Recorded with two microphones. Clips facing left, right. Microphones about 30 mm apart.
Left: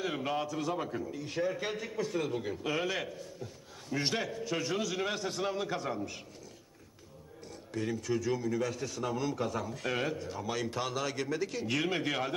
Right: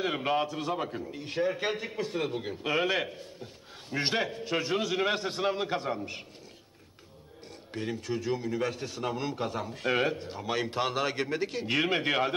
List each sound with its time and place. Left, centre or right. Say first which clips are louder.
0.0 s a man's voice: right 5 dB; right
1.1 s a man's voice: right 5 dB; right
7.7 s a man's voice: even; right